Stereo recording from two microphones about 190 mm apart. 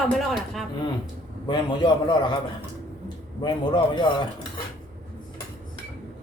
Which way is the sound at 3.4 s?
25° left (ahead or behind).